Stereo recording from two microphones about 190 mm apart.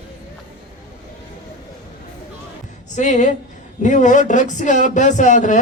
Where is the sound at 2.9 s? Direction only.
40° left (ahead or behind).